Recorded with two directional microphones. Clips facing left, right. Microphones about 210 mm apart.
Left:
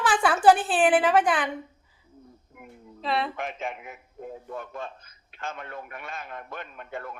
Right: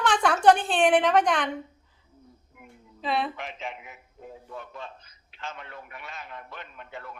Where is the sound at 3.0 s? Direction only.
Centre (ahead or behind).